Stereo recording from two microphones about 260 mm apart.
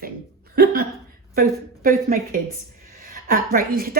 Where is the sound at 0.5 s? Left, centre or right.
Right.